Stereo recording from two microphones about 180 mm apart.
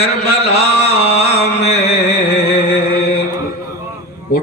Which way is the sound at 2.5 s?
60° left (ahead or behind).